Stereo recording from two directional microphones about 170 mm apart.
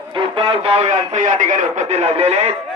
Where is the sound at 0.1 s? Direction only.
25° right (ahead or behind).